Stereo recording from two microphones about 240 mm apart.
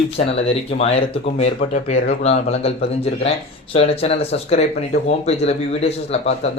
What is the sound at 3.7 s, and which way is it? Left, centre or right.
Speech, left.